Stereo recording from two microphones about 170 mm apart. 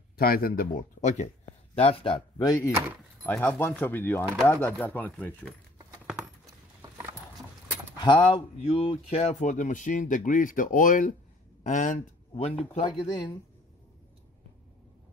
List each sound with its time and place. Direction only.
0.2 s speech: 60° left (ahead or behind); by 2.7 s 20° left (ahead or behind)
3.3 s speech: 10° left (ahead or behind)
6.4 s keys jangling: 20° right (ahead or behind)
8.0 s speech: 30° left (ahead or behind); by 12.4 s 50° left (ahead or behind)
12.7 s speech: 25° left (ahead or behind)